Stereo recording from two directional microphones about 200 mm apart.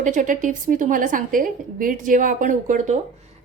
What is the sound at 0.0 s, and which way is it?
A woman's voice, 40° right (ahead or behind).